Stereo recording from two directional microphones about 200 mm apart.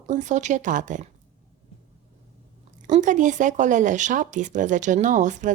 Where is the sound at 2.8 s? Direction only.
40° right (ahead or behind).